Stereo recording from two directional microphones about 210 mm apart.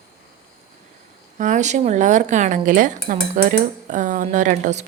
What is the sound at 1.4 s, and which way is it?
Speech, 35° right (ahead or behind).